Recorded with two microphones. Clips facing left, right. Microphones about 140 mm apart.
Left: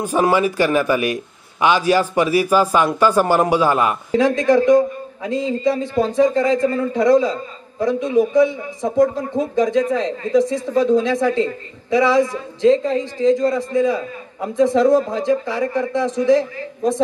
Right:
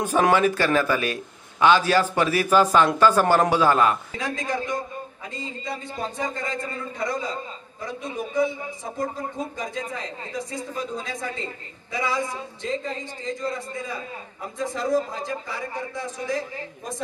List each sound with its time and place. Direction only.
0.0 s a man's voice: 10° left (ahead or behind)
4.1 s a man's voice: 90° left